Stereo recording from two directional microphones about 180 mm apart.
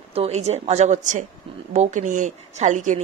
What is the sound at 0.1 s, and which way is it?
Speech, 35° right (ahead or behind).